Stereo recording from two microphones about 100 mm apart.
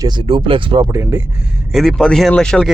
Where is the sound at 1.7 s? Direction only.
Centre (ahead or behind).